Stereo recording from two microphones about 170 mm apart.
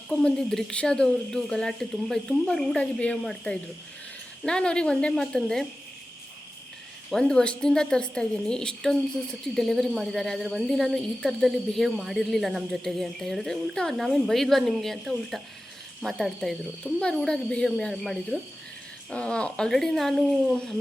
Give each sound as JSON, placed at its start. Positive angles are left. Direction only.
{"t": 0.1, "sound": "speech", "side_deg": 5}
{"t": 7.1, "sound": "speech", "side_deg": 5}